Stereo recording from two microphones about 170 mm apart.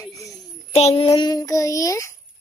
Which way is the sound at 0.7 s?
35° left (ahead or behind).